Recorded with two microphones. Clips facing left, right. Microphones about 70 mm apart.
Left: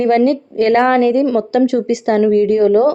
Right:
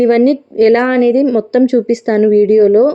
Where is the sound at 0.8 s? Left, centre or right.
Centre.